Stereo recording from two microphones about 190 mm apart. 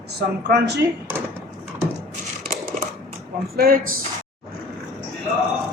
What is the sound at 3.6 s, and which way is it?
Speech, 50° right (ahead or behind).